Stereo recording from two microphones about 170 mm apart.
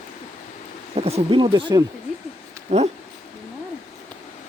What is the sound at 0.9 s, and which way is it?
Speech, 35° right (ahead or behind).